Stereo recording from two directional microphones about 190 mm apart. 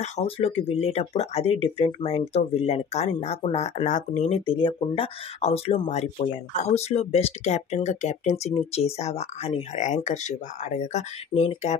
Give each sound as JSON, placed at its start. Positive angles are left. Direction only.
{"t": 0.0, "sound": "speech", "side_deg": 30}